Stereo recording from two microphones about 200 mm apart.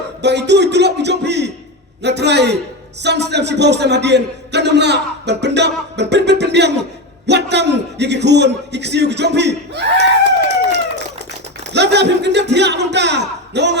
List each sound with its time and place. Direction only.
0.2 s a man's voice: 60° right (ahead or behind)
11.6 s a man's voice: 60° right (ahead or behind)